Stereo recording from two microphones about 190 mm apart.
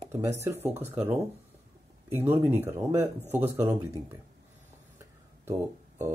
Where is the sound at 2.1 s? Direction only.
10° right (ahead or behind).